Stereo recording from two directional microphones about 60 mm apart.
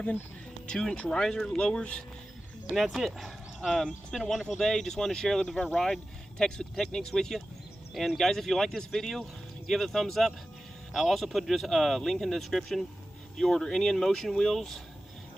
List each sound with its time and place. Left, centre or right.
0.7 s speech: centre
2.6 s speech: centre